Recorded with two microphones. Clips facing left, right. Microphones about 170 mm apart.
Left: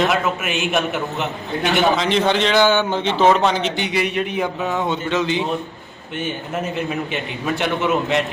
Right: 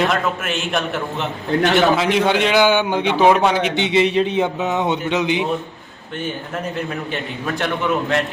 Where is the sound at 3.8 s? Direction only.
25° right (ahead or behind).